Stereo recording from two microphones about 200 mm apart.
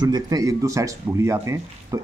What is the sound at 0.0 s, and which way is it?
Speech, 20° right (ahead or behind).